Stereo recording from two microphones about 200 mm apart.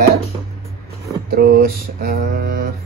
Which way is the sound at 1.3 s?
50° right (ahead or behind).